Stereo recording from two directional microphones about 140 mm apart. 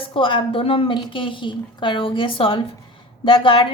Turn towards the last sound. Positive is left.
turn(degrees=35)  # may be behind; listen again after turning